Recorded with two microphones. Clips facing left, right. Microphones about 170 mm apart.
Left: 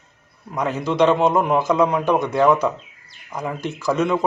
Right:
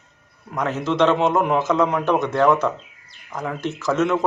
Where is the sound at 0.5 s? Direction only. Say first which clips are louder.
Left 1 dB; 10° left (ahead or behind).